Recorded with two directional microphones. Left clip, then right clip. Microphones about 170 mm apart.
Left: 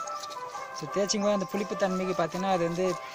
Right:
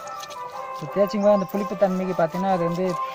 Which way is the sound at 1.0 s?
20° left (ahead or behind).